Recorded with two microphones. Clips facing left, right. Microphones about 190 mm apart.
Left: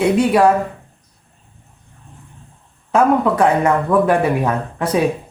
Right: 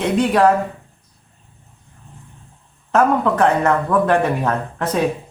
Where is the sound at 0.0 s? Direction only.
10° left (ahead or behind).